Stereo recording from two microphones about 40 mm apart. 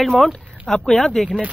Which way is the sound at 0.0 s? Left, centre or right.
Centre.